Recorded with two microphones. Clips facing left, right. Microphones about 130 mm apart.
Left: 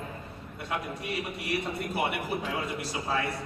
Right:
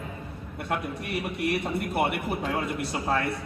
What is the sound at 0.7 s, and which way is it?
A man's voice, 55° right (ahead or behind).